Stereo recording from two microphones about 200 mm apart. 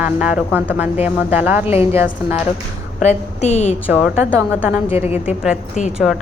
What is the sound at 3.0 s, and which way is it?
Speech, 35° left (ahead or behind).